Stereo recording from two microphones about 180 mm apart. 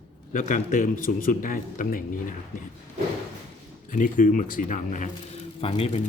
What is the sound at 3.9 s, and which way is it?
Speech, 45° left (ahead or behind).